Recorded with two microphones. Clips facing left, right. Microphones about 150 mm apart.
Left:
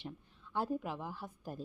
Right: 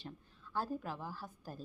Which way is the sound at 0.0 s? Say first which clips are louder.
Left 3 dB; 20° left (ahead or behind).